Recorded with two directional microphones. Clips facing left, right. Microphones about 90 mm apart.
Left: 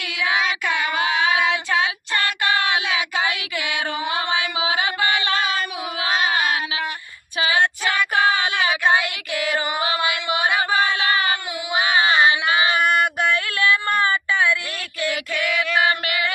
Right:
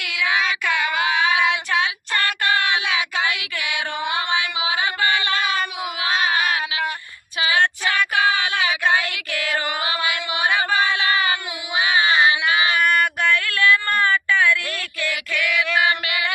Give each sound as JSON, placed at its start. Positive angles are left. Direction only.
{"t": 0.0, "sound": "child singing", "side_deg": 35}
{"t": 0.3, "sound": "child singing", "side_deg": 20}
{"t": 0.7, "sound": "child singing", "side_deg": 35}
{"t": 3.7, "sound": "music", "side_deg": 35}
{"t": 6.0, "sound": "a sound", "side_deg": 35}
{"t": 7.5, "sound": "female singing", "side_deg": 20}
{"t": 8.9, "sound": "child singing", "side_deg": 15}
{"t": 9.8, "sound": "a sound", "side_deg": 30}
{"t": 13.4, "sound": "a sound", "side_deg": 20}